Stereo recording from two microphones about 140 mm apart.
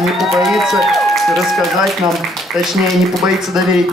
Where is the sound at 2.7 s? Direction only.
Centre (ahead or behind).